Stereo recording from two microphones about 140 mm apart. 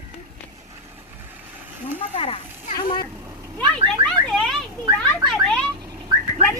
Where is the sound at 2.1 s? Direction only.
45° left (ahead or behind).